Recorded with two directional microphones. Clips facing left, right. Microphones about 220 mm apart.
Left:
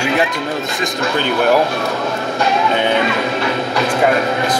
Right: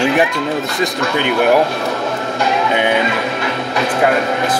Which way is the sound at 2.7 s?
15° right (ahead or behind).